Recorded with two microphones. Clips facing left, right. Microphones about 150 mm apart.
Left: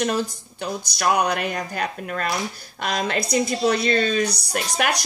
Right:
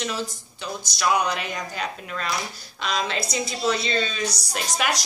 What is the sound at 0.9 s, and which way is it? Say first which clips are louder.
A woman's voice: left 2 dB; 60° left (ahead or behind).